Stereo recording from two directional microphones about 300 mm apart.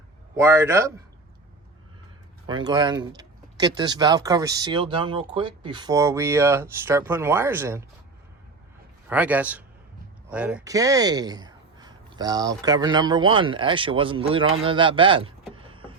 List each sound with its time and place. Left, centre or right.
0.3 s speech: centre
2.5 s speech: centre
9.0 s a man's voice: centre
15.5 s vehicle: centre